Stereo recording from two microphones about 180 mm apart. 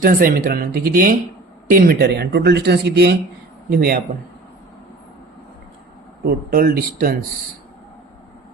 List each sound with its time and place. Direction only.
0.0 s speech: 50° right (ahead or behind)
3.7 s speech: 55° right (ahead or behind)
6.2 s speech: 55° right (ahead or behind)